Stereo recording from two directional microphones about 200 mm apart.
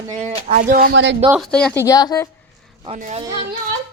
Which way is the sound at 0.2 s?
45° right (ahead or behind).